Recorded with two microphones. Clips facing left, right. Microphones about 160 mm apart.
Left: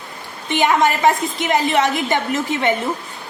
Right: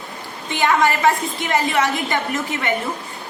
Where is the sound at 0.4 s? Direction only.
20° left (ahead or behind).